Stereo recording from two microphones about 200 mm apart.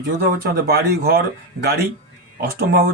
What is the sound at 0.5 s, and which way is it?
Speech, 50° right (ahead or behind).